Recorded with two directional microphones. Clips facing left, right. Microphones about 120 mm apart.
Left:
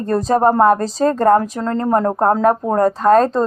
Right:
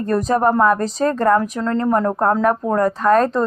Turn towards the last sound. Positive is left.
turn(degrees=30)  # may be behind; listen again after turning